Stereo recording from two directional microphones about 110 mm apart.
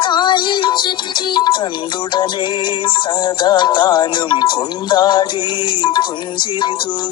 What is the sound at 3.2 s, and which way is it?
Music, 40° left (ahead or behind).